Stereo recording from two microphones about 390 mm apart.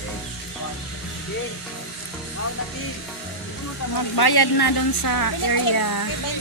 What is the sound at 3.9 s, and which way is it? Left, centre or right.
Speech, left.